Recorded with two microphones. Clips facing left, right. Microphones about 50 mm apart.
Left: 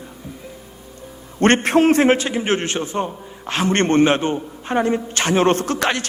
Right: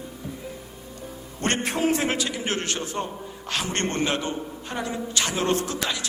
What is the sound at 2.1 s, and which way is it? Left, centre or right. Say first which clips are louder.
A man's voice: left 9 dB; left.